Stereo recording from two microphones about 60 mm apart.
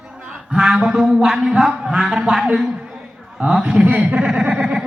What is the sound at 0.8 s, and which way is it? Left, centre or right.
Speech, centre.